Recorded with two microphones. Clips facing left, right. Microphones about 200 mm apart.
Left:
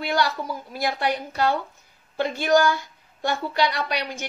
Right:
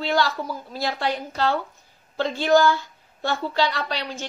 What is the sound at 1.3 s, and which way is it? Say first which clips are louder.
A woman's voice: even; 15° left (ahead or behind).